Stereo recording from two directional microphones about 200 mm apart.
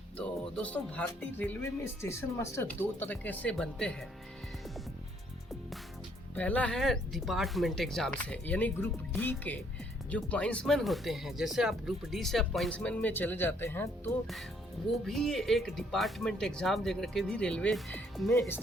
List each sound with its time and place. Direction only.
0.2 s speech: 5° left (ahead or behind)
6.3 s speech: 5° left (ahead or behind)